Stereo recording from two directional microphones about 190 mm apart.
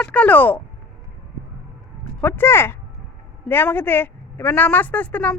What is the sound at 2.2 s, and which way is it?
A woman's voice, 10° left (ahead or behind).